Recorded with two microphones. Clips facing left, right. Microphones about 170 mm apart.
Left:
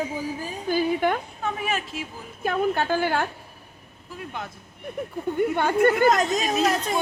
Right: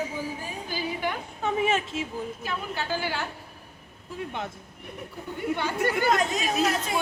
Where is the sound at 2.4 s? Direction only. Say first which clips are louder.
Left 9 dB; 50° left (ahead or behind).